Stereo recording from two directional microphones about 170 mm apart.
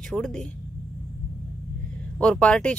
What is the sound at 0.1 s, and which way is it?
Speech, 5° left (ahead or behind).